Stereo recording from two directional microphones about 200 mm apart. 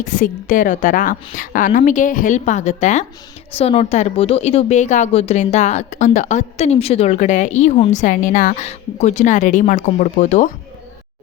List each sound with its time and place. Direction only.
0.0 s a woman's voice: 40° left (ahead or behind)